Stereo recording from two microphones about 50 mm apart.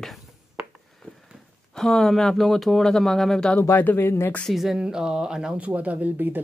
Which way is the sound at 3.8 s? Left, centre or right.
Left.